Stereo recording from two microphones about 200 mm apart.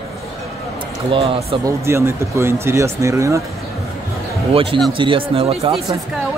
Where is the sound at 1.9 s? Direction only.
15° right (ahead or behind).